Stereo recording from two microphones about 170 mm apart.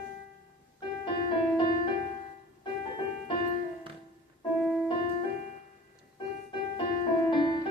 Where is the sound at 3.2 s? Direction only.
30° left (ahead or behind).